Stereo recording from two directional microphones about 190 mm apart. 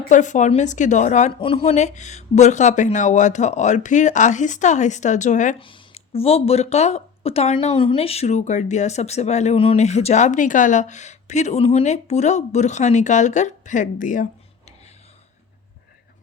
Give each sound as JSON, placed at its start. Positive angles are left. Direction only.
{"t": 0.1, "sound": "speech", "side_deg": 40}
{"t": 5.5, "sound": "speech", "side_deg": 25}